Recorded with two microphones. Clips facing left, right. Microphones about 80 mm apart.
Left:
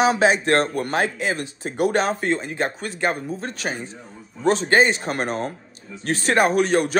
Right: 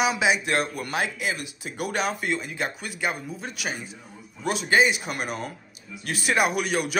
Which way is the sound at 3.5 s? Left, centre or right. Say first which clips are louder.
Left 4 dB; centre.